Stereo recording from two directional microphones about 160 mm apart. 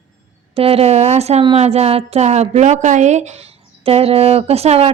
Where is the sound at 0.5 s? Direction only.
40° right (ahead or behind).